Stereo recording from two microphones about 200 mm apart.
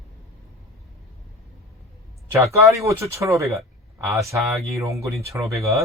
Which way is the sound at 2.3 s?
15° right (ahead or behind).